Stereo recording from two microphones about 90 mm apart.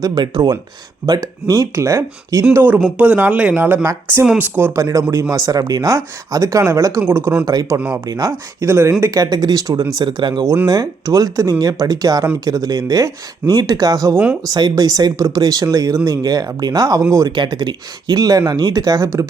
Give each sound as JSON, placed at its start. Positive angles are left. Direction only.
{"t": 0.0, "sound": "speech", "side_deg": -50}
{"t": 2.5, "sound": "speech", "side_deg": -20}
{"t": 4.7, "sound": "speech", "side_deg": -35}
{"t": 7.4, "sound": "speech", "side_deg": -40}
{"t": 9.0, "sound": "speech", "side_deg": -45}
{"t": 17.3, "sound": "speech", "side_deg": -55}